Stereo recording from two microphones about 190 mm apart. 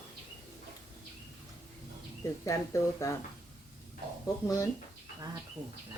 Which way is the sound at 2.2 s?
15° left (ahead or behind).